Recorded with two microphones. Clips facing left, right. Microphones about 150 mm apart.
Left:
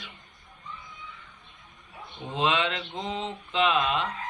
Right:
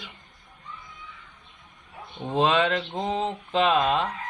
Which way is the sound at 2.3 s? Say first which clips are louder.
Right 5 dB; 45° right (ahead or behind).